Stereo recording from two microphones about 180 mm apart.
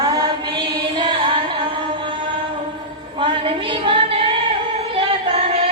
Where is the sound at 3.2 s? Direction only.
30° right (ahead or behind).